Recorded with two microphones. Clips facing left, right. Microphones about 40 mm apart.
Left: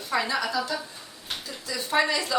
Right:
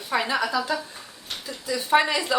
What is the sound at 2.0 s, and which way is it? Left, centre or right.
Speech, centre.